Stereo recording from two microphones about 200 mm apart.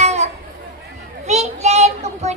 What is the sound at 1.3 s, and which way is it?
Child singing, 35° right (ahead or behind).